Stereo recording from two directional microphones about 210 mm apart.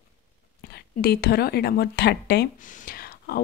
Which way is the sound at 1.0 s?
50° left (ahead or behind).